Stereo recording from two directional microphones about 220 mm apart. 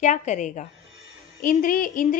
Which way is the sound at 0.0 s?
35° left (ahead or behind).